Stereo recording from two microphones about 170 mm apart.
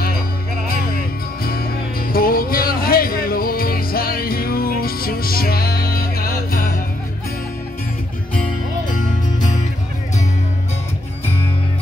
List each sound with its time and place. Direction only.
0.7 s music: 60° left (ahead or behind)
8.9 s music: 45° left (ahead or behind)